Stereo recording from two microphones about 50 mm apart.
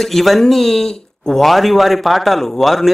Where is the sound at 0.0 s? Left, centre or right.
Centre.